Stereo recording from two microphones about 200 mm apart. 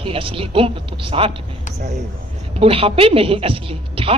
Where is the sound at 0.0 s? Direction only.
25° right (ahead or behind).